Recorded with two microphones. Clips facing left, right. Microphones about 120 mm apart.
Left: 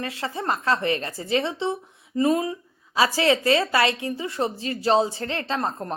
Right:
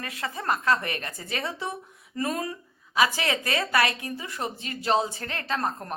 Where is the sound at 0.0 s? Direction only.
30° left (ahead or behind).